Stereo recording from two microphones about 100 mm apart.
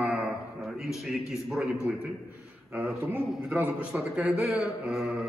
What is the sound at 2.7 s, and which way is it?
A man's voice, 20° right (ahead or behind).